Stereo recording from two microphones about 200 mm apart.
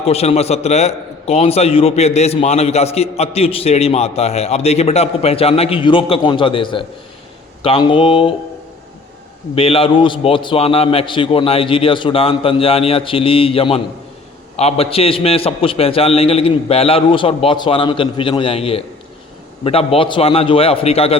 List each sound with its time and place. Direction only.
0.0 s a man's voice: 30° left (ahead or behind)
9.6 s a man's voice: 30° left (ahead or behind)